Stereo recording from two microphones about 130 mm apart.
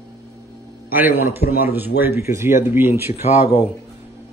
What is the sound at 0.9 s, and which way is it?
Speech, 15° right (ahead or behind).